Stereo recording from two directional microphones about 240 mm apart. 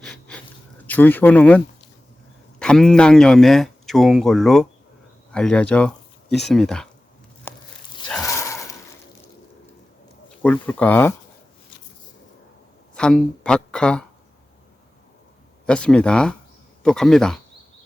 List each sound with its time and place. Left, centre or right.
0.0 s wheeze: centre
0.9 s speech: centre
7.5 s a sound: centre
10.4 s speech: centre
12.9 s speech: centre
15.6 s speech: centre